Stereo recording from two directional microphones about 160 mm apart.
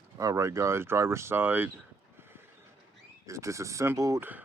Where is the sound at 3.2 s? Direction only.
20° right (ahead or behind).